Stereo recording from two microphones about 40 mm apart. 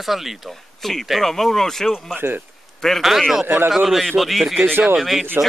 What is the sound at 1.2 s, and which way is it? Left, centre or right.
Speech, centre.